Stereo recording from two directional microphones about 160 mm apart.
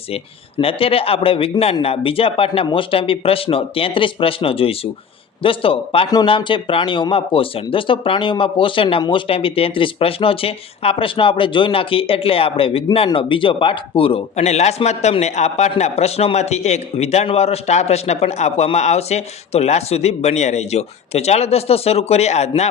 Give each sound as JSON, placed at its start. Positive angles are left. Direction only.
{"t": 0.1, "sound": "a man's voice", "side_deg": 35}